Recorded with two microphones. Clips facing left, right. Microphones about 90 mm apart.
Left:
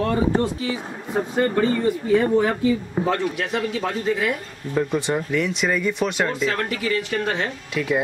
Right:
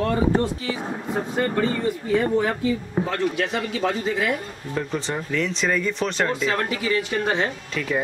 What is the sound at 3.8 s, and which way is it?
Speech, centre (ahead or behind).